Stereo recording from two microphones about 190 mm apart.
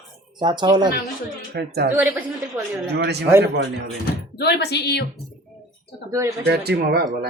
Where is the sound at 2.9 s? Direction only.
60° right (ahead or behind).